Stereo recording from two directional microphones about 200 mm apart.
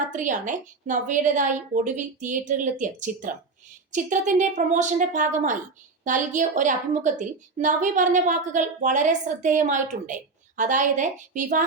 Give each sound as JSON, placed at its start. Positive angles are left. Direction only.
{"t": 0.1, "sound": "a woman's voice", "side_deg": -40}